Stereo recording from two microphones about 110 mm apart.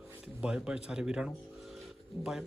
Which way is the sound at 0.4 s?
10° right (ahead or behind).